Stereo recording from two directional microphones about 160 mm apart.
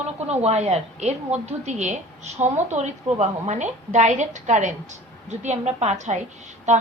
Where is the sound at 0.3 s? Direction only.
40° right (ahead or behind).